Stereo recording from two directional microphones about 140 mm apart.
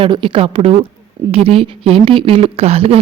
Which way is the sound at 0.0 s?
40° right (ahead or behind).